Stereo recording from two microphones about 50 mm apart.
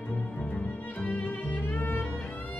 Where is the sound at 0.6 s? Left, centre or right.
Left.